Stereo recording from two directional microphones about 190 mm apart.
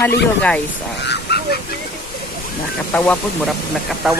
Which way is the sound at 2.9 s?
5° left (ahead or behind).